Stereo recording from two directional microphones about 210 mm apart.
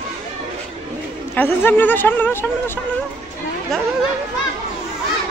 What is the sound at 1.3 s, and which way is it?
A woman's voice, 10° left (ahead or behind).